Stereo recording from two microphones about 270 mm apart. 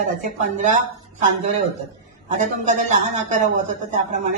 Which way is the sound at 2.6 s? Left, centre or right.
Right.